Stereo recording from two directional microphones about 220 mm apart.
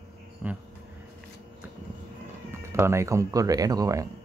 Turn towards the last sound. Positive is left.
turn(degrees=-15)  # may be behind; listen again after turning